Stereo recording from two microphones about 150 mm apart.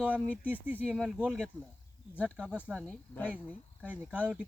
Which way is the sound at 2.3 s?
10° right (ahead or behind).